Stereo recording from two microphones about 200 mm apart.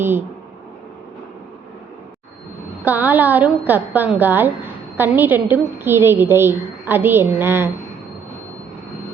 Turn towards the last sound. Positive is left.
turn(degrees=-10)  # may be behind; listen again after turning